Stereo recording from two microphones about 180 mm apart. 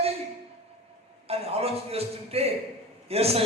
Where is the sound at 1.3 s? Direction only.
35° right (ahead or behind).